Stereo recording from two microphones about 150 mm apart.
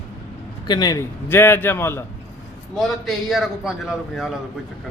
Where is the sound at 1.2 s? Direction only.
15° left (ahead or behind).